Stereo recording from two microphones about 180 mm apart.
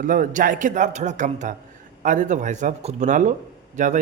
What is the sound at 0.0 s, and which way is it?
A man's voice, 50° right (ahead or behind).